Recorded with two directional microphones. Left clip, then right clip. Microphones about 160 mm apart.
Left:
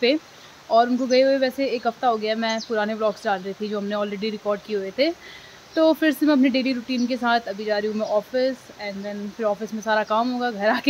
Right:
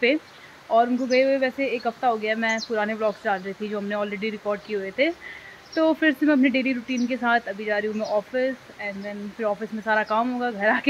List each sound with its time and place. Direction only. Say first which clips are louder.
0.7 s speech: left 2 dB; 15° left (ahead or behind)